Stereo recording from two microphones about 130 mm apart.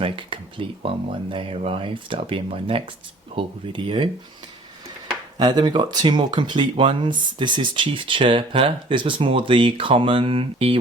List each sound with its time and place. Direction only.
0.0 s speech: 40° right (ahead or behind)
5.4 s speech: 35° right (ahead or behind)